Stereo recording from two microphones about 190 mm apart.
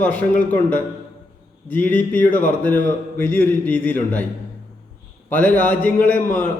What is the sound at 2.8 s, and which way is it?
A man's voice, 10° left (ahead or behind).